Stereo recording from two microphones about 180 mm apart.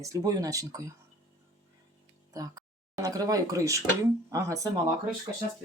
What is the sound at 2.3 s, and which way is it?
Speech, 20° right (ahead or behind).